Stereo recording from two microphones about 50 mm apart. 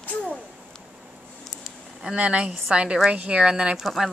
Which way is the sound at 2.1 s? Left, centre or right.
Right.